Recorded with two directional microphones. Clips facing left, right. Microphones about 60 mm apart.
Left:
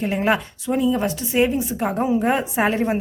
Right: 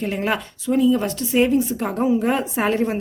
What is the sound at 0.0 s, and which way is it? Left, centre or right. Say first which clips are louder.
A woman's voice: left 3 dB; centre.